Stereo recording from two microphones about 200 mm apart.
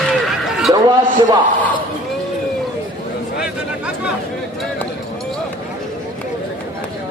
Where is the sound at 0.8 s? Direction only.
20° right (ahead or behind).